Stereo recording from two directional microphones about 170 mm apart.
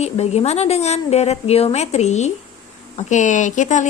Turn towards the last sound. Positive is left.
turn(degrees=45)  # may be behind; listen again after turning